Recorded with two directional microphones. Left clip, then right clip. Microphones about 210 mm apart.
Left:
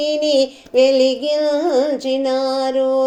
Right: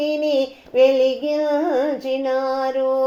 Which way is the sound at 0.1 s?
40° left (ahead or behind).